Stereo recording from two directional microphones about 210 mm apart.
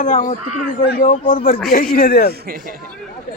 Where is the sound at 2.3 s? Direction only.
45° right (ahead or behind).